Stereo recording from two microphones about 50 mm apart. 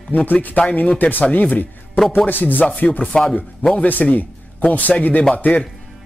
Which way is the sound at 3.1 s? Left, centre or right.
Centre.